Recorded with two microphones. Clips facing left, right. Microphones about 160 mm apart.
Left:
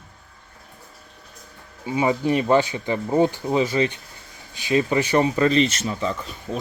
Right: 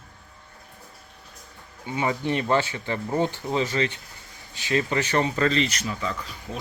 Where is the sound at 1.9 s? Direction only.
15° left (ahead or behind).